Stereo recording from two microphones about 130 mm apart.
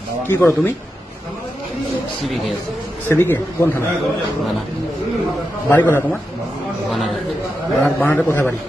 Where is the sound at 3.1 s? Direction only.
20° left (ahead or behind).